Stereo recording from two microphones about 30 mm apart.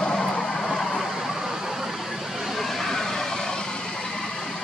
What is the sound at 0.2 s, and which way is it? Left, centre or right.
Vehicle, left.